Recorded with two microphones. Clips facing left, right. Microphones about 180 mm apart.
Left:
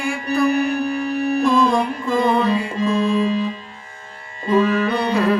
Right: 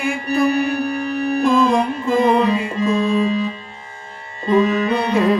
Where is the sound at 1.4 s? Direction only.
20° right (ahead or behind).